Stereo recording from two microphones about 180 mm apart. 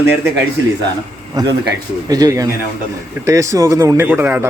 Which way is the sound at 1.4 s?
20° right (ahead or behind).